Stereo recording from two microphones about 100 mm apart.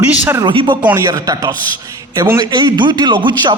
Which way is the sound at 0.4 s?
55° right (ahead or behind).